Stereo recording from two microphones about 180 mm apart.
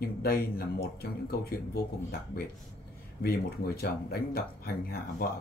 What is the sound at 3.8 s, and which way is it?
Speech, 60° left (ahead or behind).